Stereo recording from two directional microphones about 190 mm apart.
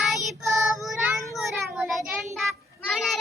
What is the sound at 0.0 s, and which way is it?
Child singing, centre (ahead or behind).